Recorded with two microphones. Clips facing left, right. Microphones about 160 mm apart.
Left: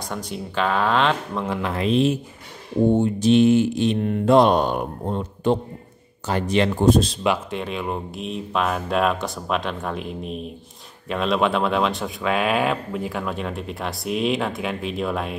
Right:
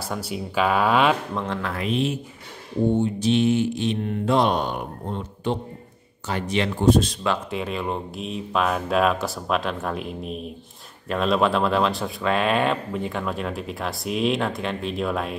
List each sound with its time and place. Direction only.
0.0 s speech: 5° right (ahead or behind)
1.3 s speech: 5° left (ahead or behind)
1.6 s speech: 25° left (ahead or behind)
3.0 s speech: 45° left (ahead or behind)
7.5 s speech: centre (ahead or behind)